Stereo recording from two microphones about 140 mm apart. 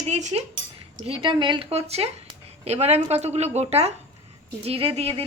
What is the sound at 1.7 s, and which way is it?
Speech, 50° right (ahead or behind).